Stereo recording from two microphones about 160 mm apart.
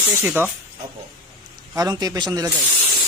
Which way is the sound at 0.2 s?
15° right (ahead or behind).